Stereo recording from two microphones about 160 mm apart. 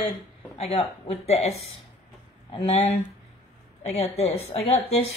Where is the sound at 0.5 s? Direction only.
40° left (ahead or behind).